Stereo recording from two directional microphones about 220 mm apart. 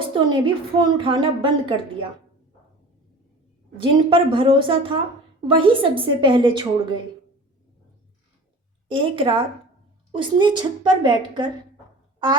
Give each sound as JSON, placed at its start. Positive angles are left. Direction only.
{"t": 0.0, "sound": "a woman's voice", "side_deg": -20}
{"t": 3.8, "sound": "a woman's voice", "side_deg": -20}
{"t": 8.9, "sound": "a woman's voice", "side_deg": -25}